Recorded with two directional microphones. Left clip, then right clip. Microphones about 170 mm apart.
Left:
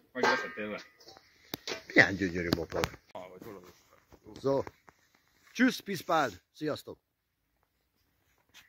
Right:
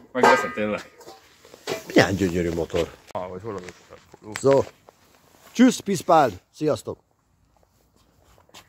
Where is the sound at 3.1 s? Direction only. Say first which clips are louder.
Right 14 dB; 50° right (ahead or behind).